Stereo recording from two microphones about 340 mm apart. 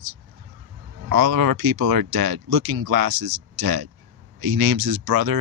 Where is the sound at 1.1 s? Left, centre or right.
Right.